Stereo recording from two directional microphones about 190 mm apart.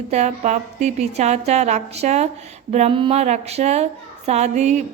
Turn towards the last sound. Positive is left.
turn(degrees=-35)  # may be behind; listen again after turning